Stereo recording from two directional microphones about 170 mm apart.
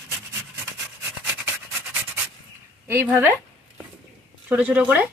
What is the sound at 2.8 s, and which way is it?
Speech, 15° right (ahead or behind).